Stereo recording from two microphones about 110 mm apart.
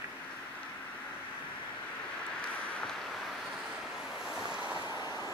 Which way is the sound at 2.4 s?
10° left (ahead or behind).